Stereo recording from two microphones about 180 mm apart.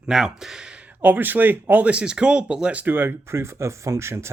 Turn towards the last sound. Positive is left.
turn(degrees=-15)  # may be behind; listen again after turning